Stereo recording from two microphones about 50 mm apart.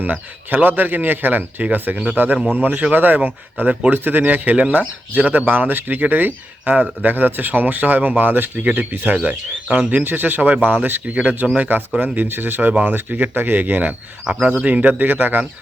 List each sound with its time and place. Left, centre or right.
0.0 s speech: right
10.0 s speech: right